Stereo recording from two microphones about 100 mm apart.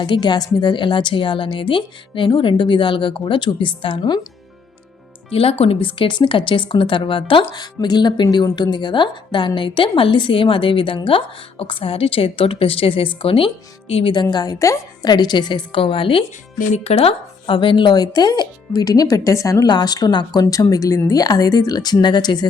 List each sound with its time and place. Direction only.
0.0 s speech: 50° left (ahead or behind)
5.3 s a woman's voice: 75° left (ahead or behind)
14.1 s a woman's voice: 50° left (ahead or behind)
15.1 s a woman's voice: 45° left (ahead or behind)
16.7 s speech: 90° left; by 22.4 s 45° left (ahead or behind)